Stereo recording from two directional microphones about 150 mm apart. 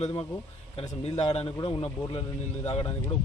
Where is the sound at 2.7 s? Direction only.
35° left (ahead or behind).